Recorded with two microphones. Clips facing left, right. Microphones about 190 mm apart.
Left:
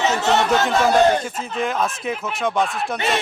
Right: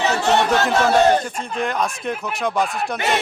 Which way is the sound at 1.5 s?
Centre (ahead or behind).